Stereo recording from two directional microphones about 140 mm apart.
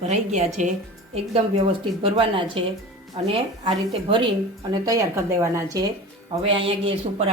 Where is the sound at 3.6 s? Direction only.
35° right (ahead or behind).